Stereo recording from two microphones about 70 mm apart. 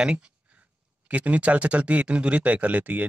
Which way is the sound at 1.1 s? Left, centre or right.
Centre.